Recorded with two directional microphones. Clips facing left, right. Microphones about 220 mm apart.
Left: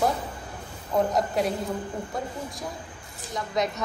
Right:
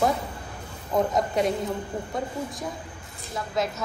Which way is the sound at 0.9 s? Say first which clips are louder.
Even; centre (ahead or behind).